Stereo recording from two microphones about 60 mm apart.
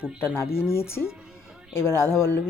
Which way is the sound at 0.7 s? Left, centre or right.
Left.